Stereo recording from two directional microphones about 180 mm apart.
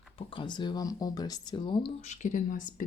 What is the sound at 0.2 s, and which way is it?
Speech, 30° left (ahead or behind).